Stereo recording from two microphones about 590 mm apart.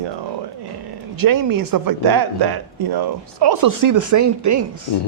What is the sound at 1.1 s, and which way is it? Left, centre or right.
A woman's voice, right.